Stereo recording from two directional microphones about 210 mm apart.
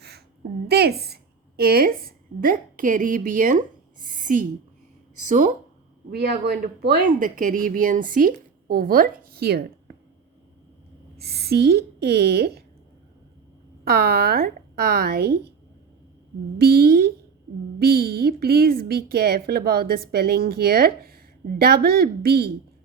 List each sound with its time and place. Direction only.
0.7 s a woman's voice: 50° right (ahead or behind)
4.1 s a sound: 40° right (ahead or behind)
5.2 s speech: 40° right (ahead or behind)
6.1 s speech: 50° right (ahead or behind)
11.2 s speech: 50° right (ahead or behind)
13.8 s speech: 45° right (ahead or behind)
16.6 s speech: 45° right (ahead or behind)